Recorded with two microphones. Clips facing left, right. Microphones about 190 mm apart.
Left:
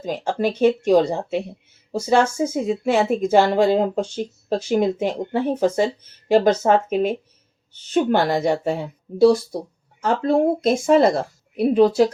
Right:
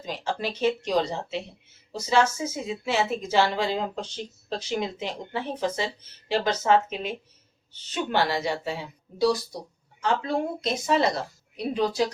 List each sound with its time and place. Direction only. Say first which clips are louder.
0.0 s speech: left 8 dB; 50° left (ahead or behind)